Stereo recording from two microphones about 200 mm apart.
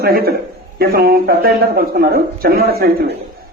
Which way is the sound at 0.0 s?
50° right (ahead or behind).